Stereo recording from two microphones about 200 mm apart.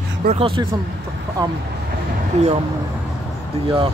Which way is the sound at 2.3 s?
35° right (ahead or behind).